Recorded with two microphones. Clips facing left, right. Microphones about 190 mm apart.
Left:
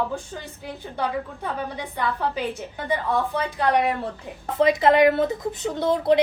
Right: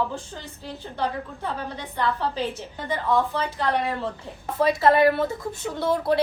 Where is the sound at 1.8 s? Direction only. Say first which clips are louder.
Right 2 dB; 15° left (ahead or behind).